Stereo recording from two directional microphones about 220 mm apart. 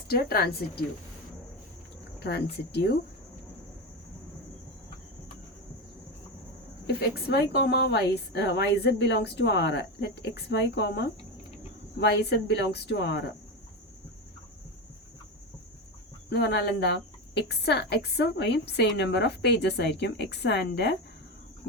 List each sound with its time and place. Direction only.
0.1 s speech: 45° left (ahead or behind)
2.1 s speech: 50° left (ahead or behind)
6.8 s speech: 50° left (ahead or behind)
16.3 s speech: 50° left (ahead or behind)